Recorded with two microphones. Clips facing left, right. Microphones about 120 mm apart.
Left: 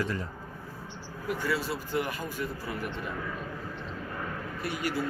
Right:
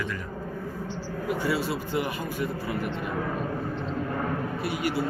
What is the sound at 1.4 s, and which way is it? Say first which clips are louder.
Speech: right 3 dB; 10° right (ahead or behind).